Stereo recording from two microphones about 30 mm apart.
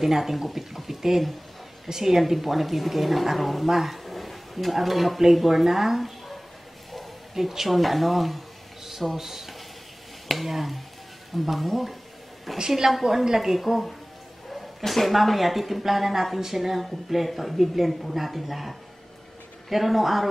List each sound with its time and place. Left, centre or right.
0.0 s a woman's voice: centre
4.0 s a sound: centre
5.3 s a woman's voice: centre
7.3 s a woman's voice: centre
12.5 s a woman's voice: centre